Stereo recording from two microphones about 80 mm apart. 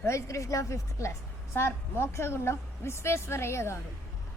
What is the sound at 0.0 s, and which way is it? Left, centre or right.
A woman's voice, left.